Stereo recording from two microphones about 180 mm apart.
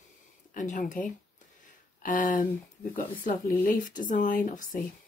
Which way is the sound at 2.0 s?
45° left (ahead or behind).